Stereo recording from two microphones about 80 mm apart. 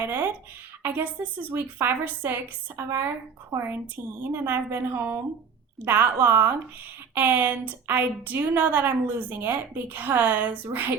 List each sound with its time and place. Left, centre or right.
0.0 s a woman's voice: right